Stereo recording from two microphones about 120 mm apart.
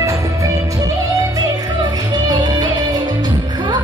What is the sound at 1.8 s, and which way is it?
Music, 35° right (ahead or behind).